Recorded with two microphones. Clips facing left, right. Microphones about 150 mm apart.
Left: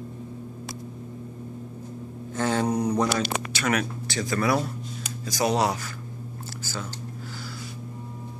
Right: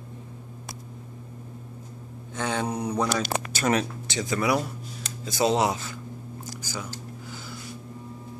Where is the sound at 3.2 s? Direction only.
35° right (ahead or behind).